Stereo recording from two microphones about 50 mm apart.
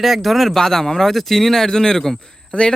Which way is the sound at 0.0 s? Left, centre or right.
Centre.